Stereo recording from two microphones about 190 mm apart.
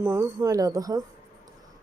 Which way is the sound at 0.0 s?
15° right (ahead or behind).